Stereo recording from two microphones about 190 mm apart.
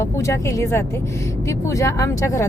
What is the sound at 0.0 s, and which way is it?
A woman's voice, 15° left (ahead or behind).